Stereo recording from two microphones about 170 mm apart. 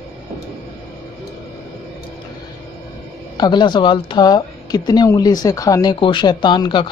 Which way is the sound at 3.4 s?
25° left (ahead or behind).